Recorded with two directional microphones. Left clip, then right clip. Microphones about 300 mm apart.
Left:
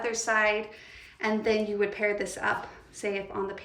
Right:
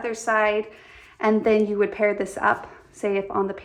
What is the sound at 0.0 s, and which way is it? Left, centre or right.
A woman's voice, centre.